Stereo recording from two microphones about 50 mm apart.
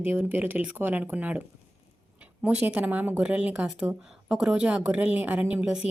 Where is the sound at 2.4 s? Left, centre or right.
Right.